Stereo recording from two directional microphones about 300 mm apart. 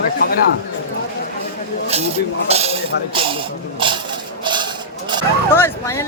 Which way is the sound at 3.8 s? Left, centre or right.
Centre.